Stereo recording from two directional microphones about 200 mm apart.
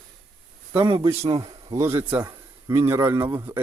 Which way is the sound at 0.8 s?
25° right (ahead or behind).